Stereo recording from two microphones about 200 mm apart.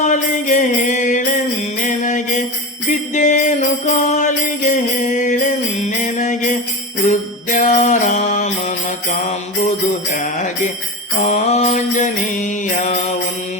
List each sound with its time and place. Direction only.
0.0 s music: 40° left (ahead or behind)
1.8 s mantra: 40° left (ahead or behind)
2.9 s jingle bell: 40° left (ahead or behind)
7.1 s mantra: 40° left (ahead or behind)
9.6 s jingle bell: 35° left (ahead or behind)
11.2 s mantra: 35° left (ahead or behind)